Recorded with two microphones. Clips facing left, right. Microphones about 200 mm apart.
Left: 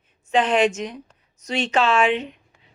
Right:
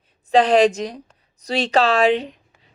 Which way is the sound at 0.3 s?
35° right (ahead or behind).